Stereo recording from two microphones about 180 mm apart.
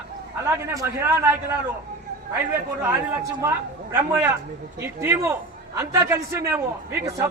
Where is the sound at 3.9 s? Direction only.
10° right (ahead or behind).